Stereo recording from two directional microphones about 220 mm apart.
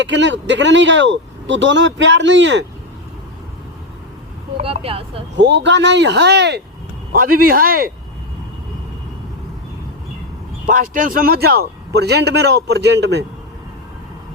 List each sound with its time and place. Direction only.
0.0 s speech: 55° right (ahead or behind)
4.5 s speech: 25° right (ahead or behind)
5.4 s a man's voice: 55° right (ahead or behind)
10.7 s a man's voice: 40° right (ahead or behind)